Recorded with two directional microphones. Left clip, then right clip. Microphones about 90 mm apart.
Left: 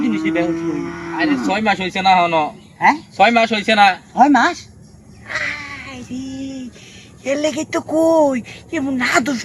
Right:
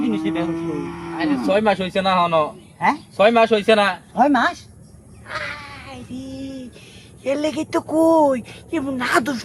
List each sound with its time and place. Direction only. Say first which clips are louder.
0.0 s cattle: left 4 dB; 25° right (ahead or behind)
1.5 s a man's voice: even; 30° right (ahead or behind)
5.3 s a sound: left 6 dB; 15° right (ahead or behind)
7.3 s speech: left 3 dB; centre (ahead or behind)
8.8 s speech: left 5 dB; 15° right (ahead or behind)